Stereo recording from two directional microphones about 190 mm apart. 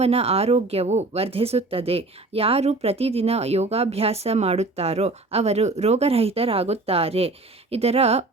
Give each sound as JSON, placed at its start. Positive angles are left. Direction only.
{"t": 0.0, "sound": "speech", "side_deg": -35}